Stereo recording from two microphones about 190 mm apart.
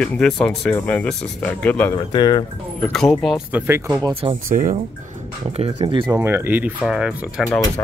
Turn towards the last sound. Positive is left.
turn(degrees=-5)  # may be behind; listen again after turning